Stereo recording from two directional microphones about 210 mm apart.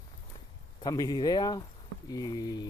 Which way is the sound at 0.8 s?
20° left (ahead or behind).